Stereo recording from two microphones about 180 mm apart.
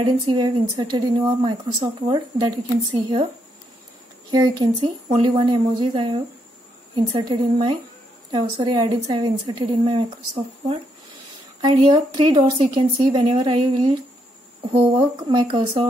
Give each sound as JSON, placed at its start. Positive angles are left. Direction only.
{"t": 0.0, "sound": "speech", "side_deg": -25}
{"t": 4.3, "sound": "speech", "side_deg": -20}
{"t": 15.2, "sound": "speech", "side_deg": -25}